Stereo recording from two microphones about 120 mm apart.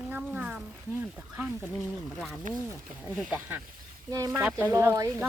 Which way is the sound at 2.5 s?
90° right.